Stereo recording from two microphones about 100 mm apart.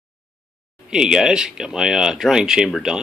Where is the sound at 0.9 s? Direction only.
5° right (ahead or behind).